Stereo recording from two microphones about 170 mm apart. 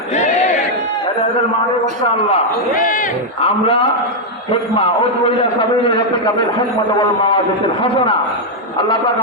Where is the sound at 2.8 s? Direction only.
50° left (ahead or behind).